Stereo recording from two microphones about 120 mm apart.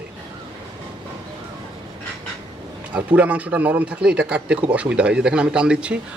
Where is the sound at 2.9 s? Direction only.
10° right (ahead or behind).